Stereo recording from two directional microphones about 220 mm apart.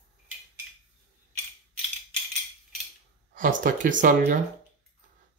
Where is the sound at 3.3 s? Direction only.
35° right (ahead or behind).